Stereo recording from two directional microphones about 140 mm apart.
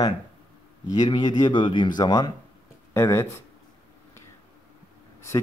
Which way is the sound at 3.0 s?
20° left (ahead or behind).